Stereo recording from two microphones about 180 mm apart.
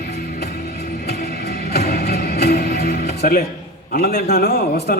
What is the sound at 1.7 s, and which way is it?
Music, 60° left (ahead or behind).